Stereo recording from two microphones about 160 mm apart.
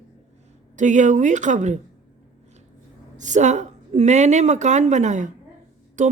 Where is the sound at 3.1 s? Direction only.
50° right (ahead or behind).